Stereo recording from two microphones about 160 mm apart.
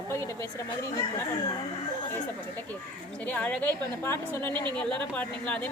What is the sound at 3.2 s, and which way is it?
A woman's voice, 10° left (ahead or behind).